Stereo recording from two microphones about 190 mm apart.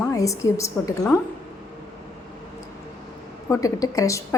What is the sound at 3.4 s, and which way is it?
Speech, 15° left (ahead or behind).